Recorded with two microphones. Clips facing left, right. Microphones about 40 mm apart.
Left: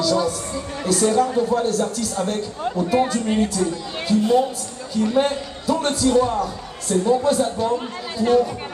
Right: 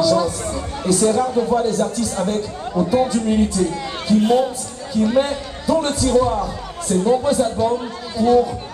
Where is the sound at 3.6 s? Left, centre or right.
Centre.